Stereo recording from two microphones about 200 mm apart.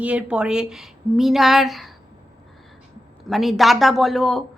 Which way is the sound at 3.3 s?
Centre (ahead or behind).